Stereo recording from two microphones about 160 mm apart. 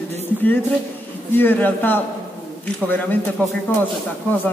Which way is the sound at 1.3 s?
10° left (ahead or behind).